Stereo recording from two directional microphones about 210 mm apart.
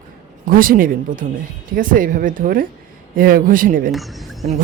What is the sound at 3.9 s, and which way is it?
Speech, centre (ahead or behind).